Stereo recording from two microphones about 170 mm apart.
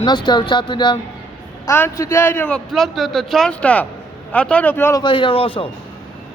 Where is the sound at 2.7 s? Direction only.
Centre (ahead or behind).